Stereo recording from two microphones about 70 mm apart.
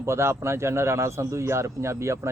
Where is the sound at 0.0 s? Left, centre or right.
Right.